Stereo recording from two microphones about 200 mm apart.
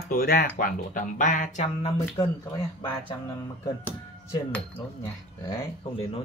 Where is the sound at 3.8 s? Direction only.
10° left (ahead or behind).